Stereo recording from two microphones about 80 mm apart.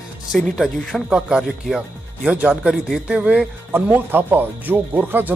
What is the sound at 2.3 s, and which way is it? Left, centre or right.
Speech, centre.